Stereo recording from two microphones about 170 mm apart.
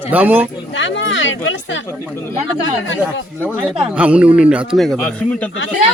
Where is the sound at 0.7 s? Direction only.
90° left.